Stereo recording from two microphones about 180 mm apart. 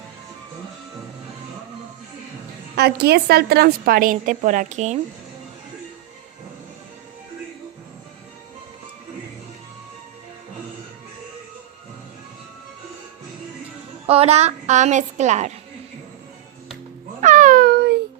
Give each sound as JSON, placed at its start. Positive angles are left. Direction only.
{"t": 2.7, "sound": "a woman's voice", "side_deg": -65}
{"t": 14.1, "sound": "a woman's voice", "side_deg": -35}
{"t": 17.2, "sound": "babbling", "side_deg": -45}